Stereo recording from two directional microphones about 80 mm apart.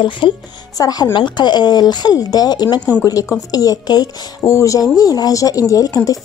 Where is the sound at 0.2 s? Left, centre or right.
Left.